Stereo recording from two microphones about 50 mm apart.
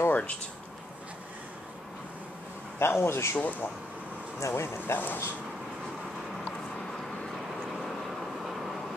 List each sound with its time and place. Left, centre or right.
0.1 s a sound: left
2.8 s speech: left
3.3 s speech: left
4.4 s speech: left
4.9 s speech: left
8.5 s vehicle: centre